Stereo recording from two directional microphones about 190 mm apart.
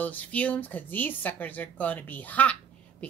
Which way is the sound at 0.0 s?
10° left (ahead or behind).